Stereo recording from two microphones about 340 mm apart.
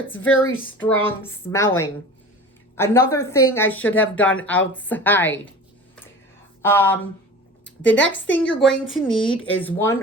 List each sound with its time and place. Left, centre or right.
0.1 s a woman's voice: left
1.5 s speech: centre
6.6 s speech: centre
7.6 s speech: left
8.6 s speech: centre